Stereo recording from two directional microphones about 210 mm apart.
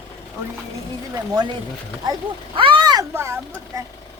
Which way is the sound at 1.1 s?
20° right (ahead or behind).